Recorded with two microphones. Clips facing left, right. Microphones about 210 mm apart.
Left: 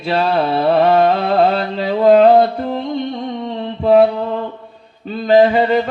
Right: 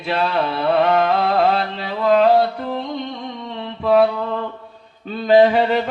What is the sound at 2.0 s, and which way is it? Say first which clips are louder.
Mantra: left 5 dB; 40° left (ahead or behind).